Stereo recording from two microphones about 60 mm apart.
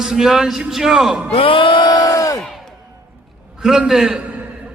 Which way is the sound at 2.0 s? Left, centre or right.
Left.